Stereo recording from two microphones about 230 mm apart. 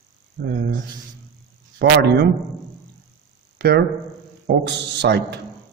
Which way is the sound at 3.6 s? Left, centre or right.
Right.